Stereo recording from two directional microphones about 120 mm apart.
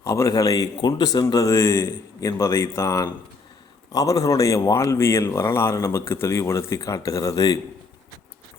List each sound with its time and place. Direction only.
0.0 s speech: 25° left (ahead or behind)